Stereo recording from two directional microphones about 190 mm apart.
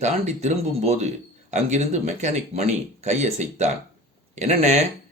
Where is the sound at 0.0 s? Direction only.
35° right (ahead or behind).